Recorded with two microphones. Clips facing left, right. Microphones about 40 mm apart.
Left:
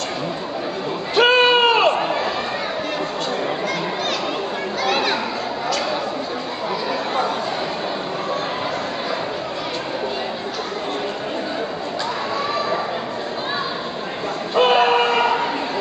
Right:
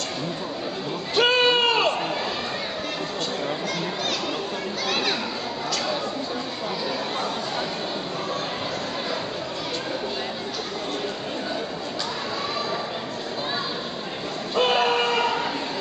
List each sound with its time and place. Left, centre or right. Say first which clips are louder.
1.1 s crowd: left 5 dB; centre
4.8 s chatter: left 6 dB; centre
14.5 s a sound: left 6 dB; centre